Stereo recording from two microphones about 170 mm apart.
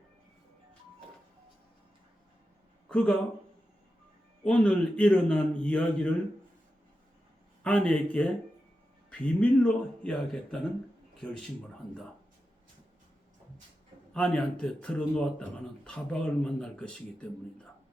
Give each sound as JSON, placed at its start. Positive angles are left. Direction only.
{"t": 2.9, "sound": "a man's voice", "side_deg": 5}
{"t": 4.4, "sound": "a man's voice", "side_deg": 5}
{"t": 7.6, "sound": "a man's voice", "side_deg": 5}
{"t": 14.1, "sound": "speech", "side_deg": 5}